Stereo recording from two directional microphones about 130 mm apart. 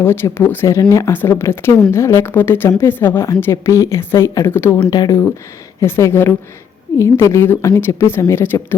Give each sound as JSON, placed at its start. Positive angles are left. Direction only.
{"t": 0.0, "sound": "speech", "side_deg": 20}
{"t": 4.9, "sound": "speech", "side_deg": 30}
{"t": 5.8, "sound": "speech", "side_deg": 20}